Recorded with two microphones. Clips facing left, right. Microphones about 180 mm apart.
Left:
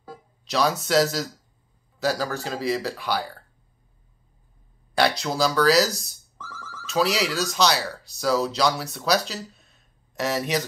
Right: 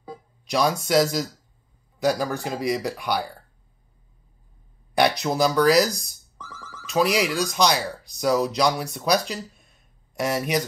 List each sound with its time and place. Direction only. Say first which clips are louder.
0.5 s speech: right 1 dB; 10° right (ahead or behind)
4.9 s speech: right 2 dB; 15° right (ahead or behind)